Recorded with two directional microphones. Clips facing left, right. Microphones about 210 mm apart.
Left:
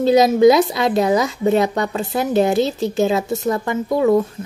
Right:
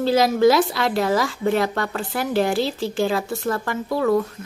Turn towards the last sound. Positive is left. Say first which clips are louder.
# left 4 dB
turn(degrees=20)  # may be behind; listen again after turning